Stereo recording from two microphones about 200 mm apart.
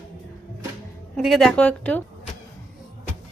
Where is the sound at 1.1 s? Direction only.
Centre (ahead or behind).